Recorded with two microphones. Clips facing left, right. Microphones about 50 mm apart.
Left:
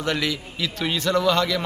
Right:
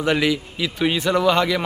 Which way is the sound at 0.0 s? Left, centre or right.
Centre.